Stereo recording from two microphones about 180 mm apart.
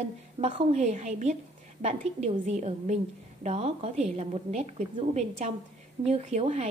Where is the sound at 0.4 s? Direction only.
35° right (ahead or behind).